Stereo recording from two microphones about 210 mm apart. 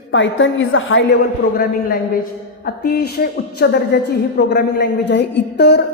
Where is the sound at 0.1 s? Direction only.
65° left (ahead or behind).